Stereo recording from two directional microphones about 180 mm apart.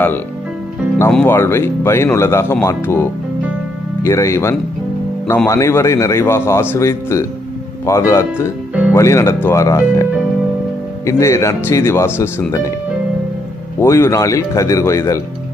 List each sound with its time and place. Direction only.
1.1 s a man's voice: 10° left (ahead or behind)
11.1 s a man's voice: 15° left (ahead or behind)
13.7 s a man's voice: 15° left (ahead or behind)